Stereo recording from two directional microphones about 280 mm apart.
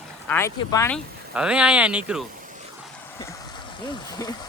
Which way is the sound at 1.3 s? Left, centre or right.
Centre.